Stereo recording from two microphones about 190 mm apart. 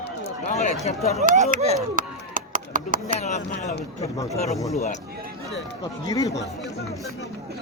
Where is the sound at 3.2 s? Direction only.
40° left (ahead or behind).